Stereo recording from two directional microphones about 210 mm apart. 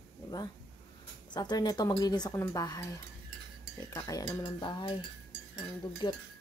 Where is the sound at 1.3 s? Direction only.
20° left (ahead or behind).